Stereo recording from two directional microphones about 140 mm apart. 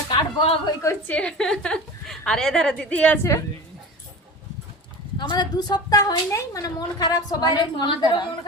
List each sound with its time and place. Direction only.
0.1 s a sound: 35° left (ahead or behind)
0.8 s a woman's voice: 20° left (ahead or behind)
1.1 s a woman's voice: 5° left (ahead or behind)
5.1 s a woman's voice: 30° left (ahead or behind)